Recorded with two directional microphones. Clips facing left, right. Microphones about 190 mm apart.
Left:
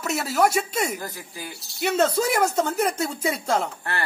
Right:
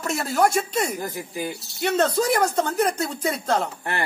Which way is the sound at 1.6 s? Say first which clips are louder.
Left 1 dB; centre (ahead or behind).